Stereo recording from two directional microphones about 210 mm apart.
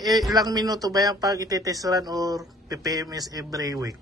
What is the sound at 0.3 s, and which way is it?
A man's voice, 20° right (ahead or behind).